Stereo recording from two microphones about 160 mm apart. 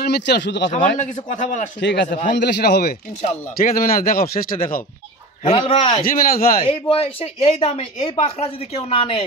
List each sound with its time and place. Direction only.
0.0 s speech: 90° left
0.7 s a man's voice: 50° left (ahead or behind)
1.8 s a man's voice: 90° left
3.6 s speech: 65° left (ahead or behind)
5.5 s speech: 35° left (ahead or behind)
6.0 s speech: 65° left (ahead or behind)
6.6 s speech: 35° left (ahead or behind)